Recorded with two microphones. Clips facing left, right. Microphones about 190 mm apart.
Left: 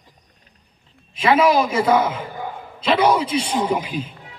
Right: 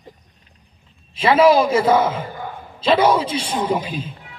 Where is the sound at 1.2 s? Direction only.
30° right (ahead or behind).